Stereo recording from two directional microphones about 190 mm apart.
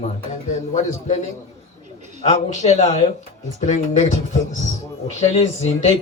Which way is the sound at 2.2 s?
35° left (ahead or behind).